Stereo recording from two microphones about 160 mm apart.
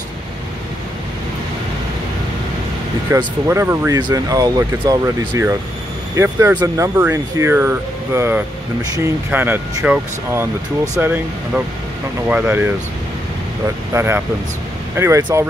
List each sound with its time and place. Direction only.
3.1 s speech: 20° right (ahead or behind)
13.9 s speech: 15° right (ahead or behind)